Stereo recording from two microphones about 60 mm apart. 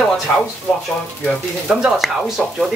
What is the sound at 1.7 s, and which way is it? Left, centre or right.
Speech, centre.